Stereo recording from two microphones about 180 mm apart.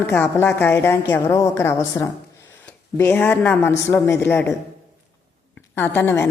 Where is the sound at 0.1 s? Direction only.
10° left (ahead or behind).